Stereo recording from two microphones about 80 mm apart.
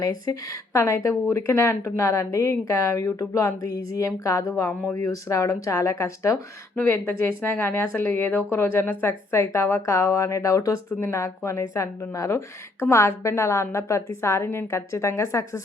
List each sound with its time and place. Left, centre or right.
0.0 s speech: left
6.7 s speech: left